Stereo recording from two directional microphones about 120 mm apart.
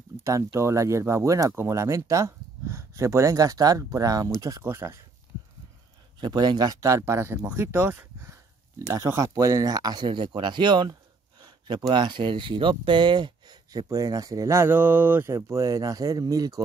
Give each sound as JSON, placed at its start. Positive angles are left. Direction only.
{"t": 0.2, "sound": "speech", "side_deg": -25}
{"t": 6.1, "sound": "speech", "side_deg": -35}